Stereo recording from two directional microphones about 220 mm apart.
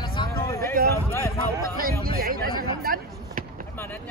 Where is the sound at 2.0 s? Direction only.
40° right (ahead or behind).